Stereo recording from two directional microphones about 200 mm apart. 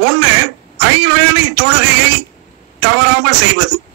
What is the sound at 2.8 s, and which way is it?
Speech, 60° right (ahead or behind).